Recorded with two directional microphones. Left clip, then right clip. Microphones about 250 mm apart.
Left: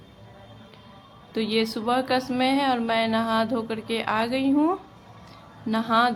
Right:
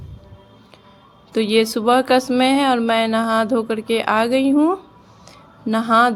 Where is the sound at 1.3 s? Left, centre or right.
Right.